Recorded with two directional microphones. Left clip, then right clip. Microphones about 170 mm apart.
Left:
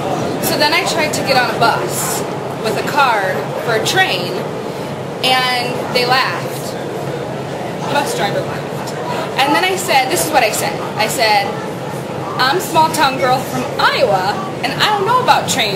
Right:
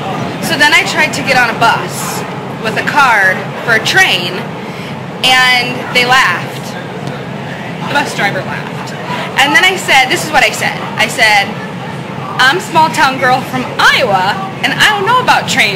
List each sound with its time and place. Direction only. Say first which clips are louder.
0.5 s a woman's voice: right 6 dB; 15° left (ahead or behind)
9.4 s a woman's voice: right 6 dB; 15° left (ahead or behind)